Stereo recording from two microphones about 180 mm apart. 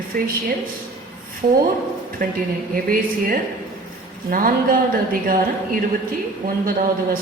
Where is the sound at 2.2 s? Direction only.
50° right (ahead or behind).